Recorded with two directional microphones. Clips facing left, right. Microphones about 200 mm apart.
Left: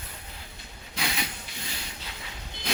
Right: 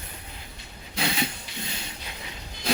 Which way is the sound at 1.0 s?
30° right (ahead or behind).